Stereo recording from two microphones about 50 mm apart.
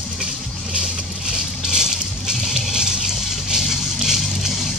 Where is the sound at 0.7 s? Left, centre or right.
Centre.